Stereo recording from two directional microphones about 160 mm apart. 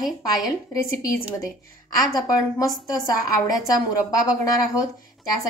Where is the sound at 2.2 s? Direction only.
20° left (ahead or behind).